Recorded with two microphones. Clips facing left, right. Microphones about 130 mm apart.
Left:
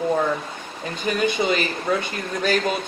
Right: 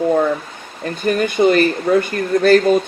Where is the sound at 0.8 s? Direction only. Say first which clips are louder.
Right 5 dB; 50° right (ahead or behind).